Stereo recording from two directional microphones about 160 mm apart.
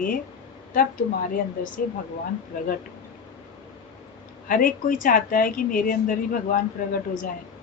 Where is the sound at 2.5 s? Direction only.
60° left (ahead or behind).